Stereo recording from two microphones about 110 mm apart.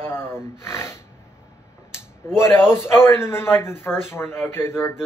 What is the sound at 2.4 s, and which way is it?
A man's voice, 20° left (ahead or behind).